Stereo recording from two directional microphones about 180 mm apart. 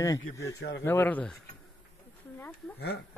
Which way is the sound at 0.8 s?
10° left (ahead or behind).